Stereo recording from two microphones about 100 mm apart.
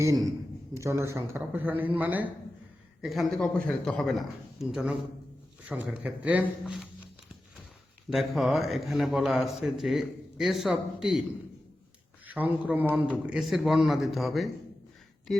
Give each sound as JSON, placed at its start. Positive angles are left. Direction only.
{"t": 0.7, "sound": "a man's voice", "side_deg": -30}
{"t": 3.0, "sound": "a man's voice", "side_deg": 0}
{"t": 3.4, "sound": "a man's voice", "side_deg": 15}
{"t": 4.7, "sound": "a man's voice", "side_deg": -5}
{"t": 5.6, "sound": "speech", "side_deg": -15}
{"t": 8.1, "sound": "a man's voice", "side_deg": 0}
{"t": 12.2, "sound": "speech", "side_deg": -15}
{"t": 13.2, "sound": "a man's voice", "side_deg": -5}